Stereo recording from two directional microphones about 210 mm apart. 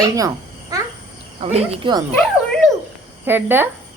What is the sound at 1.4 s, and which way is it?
Speech, 25° right (ahead or behind).